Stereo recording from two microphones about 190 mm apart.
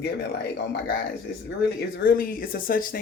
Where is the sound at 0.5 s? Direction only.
60° left (ahead or behind).